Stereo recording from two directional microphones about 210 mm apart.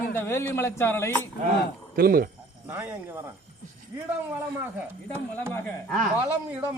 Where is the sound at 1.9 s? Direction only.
45° right (ahead or behind).